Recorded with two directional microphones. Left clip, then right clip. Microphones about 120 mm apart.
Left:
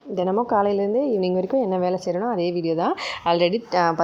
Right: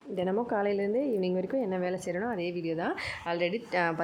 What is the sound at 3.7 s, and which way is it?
Speech, 30° left (ahead or behind).